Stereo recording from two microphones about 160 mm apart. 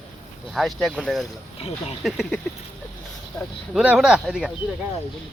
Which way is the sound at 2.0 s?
Centre (ahead or behind).